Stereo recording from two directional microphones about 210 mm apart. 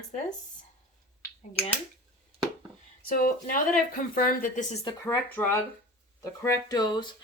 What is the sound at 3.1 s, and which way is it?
Speech, 40° left (ahead or behind).